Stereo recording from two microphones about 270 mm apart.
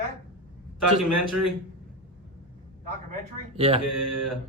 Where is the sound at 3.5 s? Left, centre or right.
Right.